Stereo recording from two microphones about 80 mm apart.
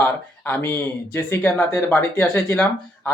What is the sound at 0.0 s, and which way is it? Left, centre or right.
Speech, left.